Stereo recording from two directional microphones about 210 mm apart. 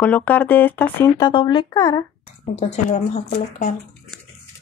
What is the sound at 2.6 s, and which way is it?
A woman's voice, 35° left (ahead or behind).